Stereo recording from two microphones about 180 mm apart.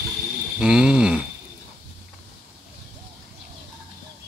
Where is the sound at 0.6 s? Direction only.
5° right (ahead or behind).